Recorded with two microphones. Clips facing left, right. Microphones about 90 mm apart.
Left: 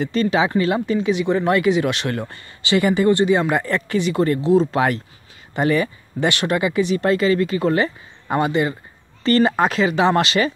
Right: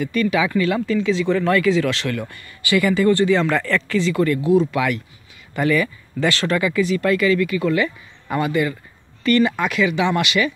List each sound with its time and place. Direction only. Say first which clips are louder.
0.0 s speech: left 1 dB; 30° left (ahead or behind)